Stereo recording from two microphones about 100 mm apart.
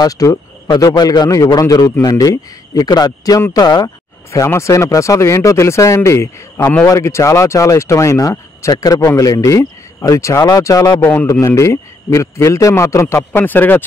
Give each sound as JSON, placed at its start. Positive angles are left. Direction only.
{"t": 0.0, "sound": "speech", "side_deg": 35}
{"t": 4.3, "sound": "a man's voice", "side_deg": 30}
{"t": 11.0, "sound": "a man's voice", "side_deg": 20}